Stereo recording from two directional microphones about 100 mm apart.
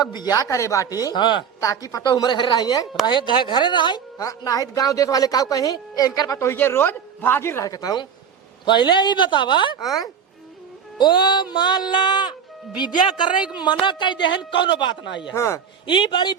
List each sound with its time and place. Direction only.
0.0 s speech: 45° left (ahead or behind)
1.6 s a man's voice: 35° left (ahead or behind); by 4.0 s 50° left (ahead or behind)
4.2 s speech: 35° left (ahead or behind)
7.7 s a man's voice: 40° left (ahead or behind)
10.9 s a man's voice: 50° left (ahead or behind)
15.4 s speech: 30° left (ahead or behind)
15.9 s a man's voice: 50° left (ahead or behind)